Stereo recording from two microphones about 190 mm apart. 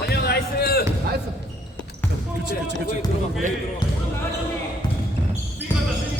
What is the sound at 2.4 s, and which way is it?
Speech, 65° right (ahead or behind).